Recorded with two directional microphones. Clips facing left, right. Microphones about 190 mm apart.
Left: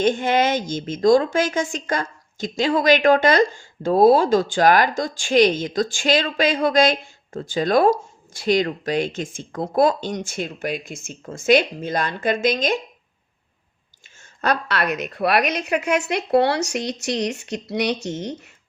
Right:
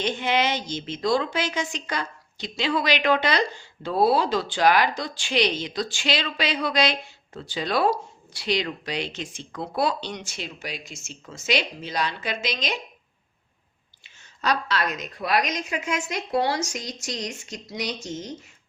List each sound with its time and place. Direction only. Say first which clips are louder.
0.0 s a woman's voice: left 6 dB; 50° left (ahead or behind)
14.0 s a woman's voice: left 4 dB; 55° left (ahead or behind)